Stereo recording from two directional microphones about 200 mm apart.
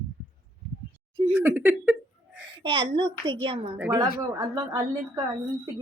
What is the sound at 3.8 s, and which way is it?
Speech, 10° right (ahead or behind).